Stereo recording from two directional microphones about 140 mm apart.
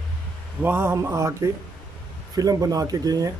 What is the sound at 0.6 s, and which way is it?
Speech, 15° right (ahead or behind).